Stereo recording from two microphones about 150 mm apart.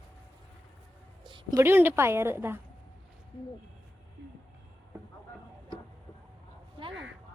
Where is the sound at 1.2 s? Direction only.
30° right (ahead or behind).